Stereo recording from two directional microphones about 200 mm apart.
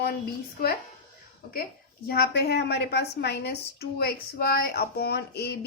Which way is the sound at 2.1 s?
50° left (ahead or behind).